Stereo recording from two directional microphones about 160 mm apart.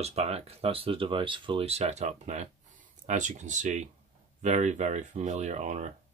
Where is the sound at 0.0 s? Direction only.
40° right (ahead or behind).